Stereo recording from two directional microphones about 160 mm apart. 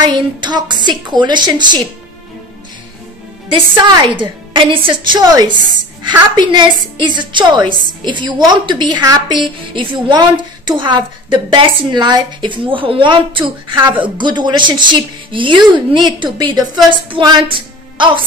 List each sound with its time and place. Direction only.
0.0 s a woman's voice: 30° right (ahead or behind)
3.5 s a woman's voice: 30° right (ahead or behind)